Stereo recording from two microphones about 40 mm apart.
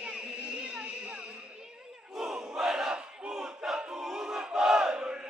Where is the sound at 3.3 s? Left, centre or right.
Centre.